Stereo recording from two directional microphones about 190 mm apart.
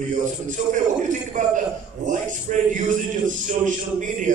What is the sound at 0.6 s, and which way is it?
A woman's voice, 40° right (ahead or behind).